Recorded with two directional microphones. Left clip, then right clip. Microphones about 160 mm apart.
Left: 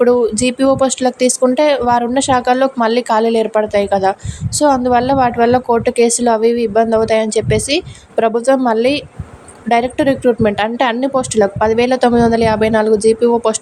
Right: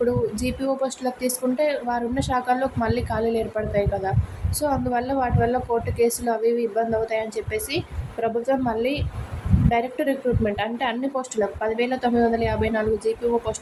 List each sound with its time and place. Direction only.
0.0 s a woman's voice: 50° left (ahead or behind)